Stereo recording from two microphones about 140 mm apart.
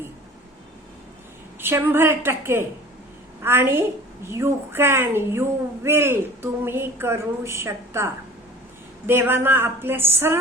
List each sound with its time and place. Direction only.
1.6 s a woman's voice: 15° right (ahead or behind)